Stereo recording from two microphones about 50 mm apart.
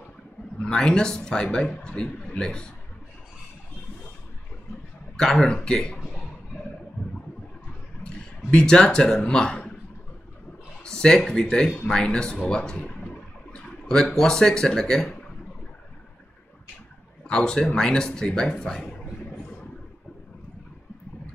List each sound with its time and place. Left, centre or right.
0.6 s a man's voice: centre
5.1 s a man's voice: centre
8.5 s a man's voice: centre
10.8 s a man's voice: centre
12.4 s a sound: centre
14.1 s a man's voice: centre
17.3 s a man's voice: centre